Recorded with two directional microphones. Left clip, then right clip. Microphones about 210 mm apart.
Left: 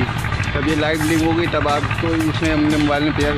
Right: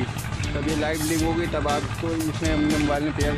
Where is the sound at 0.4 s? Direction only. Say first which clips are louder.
Left 6 dB; centre (ahead or behind).